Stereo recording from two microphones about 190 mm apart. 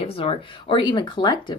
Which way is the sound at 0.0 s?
30° left (ahead or behind).